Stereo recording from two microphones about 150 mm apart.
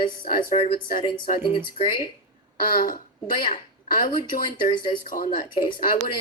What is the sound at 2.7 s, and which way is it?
A woman's voice, 70° left (ahead or behind).